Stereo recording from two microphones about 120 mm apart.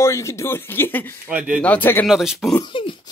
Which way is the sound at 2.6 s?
45° left (ahead or behind).